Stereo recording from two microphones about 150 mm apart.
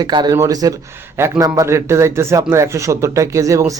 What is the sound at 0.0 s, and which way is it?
Speech, 30° right (ahead or behind).